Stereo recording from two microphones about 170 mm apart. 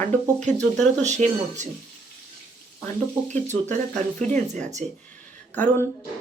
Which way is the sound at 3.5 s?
45° right (ahead or behind).